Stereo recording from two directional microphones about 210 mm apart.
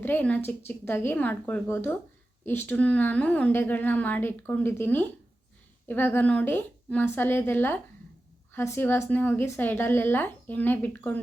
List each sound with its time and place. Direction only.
0.0 s a woman's voice: 10° left (ahead or behind)